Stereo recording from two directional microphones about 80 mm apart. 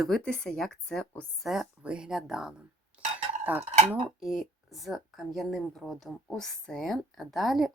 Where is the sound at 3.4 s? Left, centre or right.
Right.